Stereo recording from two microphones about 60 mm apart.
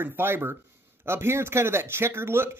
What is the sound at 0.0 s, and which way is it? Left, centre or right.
Speech, right.